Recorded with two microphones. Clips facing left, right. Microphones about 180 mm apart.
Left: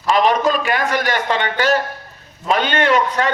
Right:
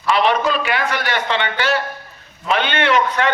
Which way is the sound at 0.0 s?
40° left (ahead or behind).